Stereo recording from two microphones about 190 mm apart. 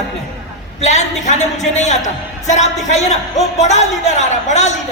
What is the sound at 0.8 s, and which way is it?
A woman's voice, 40° left (ahead or behind).